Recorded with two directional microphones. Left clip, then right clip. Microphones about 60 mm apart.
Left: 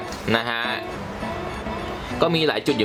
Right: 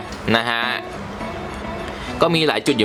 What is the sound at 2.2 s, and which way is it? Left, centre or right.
Speech, right.